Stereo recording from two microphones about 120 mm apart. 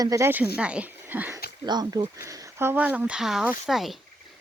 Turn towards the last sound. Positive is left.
turn(degrees=0)  # may be behind; listen again after turning